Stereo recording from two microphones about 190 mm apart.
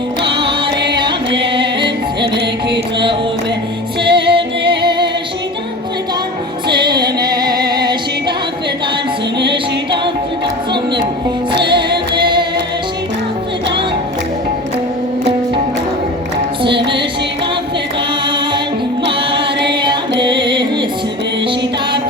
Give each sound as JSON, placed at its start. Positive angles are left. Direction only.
{"t": 1.3, "sound": "music", "side_deg": -65}
{"t": 2.6, "sound": "music", "side_deg": -25}
{"t": 6.7, "sound": "female singing", "side_deg": -25}
{"t": 11.6, "sound": "music", "side_deg": -25}
{"t": 16.6, "sound": "music", "side_deg": -25}
{"t": 19.6, "sound": "music", "side_deg": -25}